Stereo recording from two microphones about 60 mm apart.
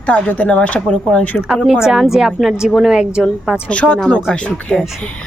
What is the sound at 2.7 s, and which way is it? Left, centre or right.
Speech, centre.